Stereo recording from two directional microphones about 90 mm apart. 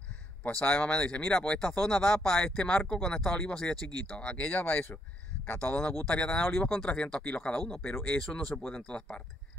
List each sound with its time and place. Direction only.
0.4 s speech: 10° left (ahead or behind)
7.9 s speech: 20° left (ahead or behind)
8.2 s speech: 5° left (ahead or behind)